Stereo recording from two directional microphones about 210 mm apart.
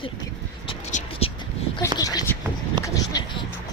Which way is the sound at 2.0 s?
15° left (ahead or behind).